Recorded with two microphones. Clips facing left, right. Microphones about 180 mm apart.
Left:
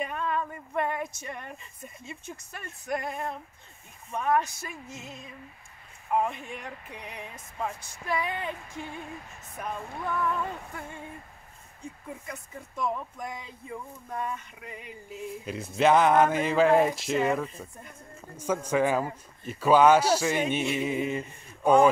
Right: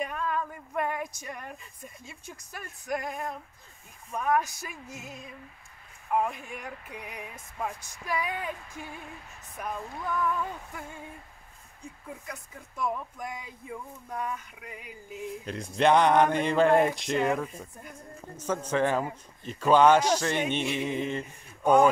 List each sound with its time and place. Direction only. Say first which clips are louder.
0.0 s a sound: left 1 dB; centre (ahead or behind)
2.5 s speech: even; 5° right (ahead or behind)
12.3 s speech: left 2 dB; 5° right (ahead or behind)
15.4 s speech: left 1 dB; 5° left (ahead or behind); by 18.2 s 10° right (ahead or behind)
18.3 s a man's voice: left 2 dB; 10° left (ahead or behind)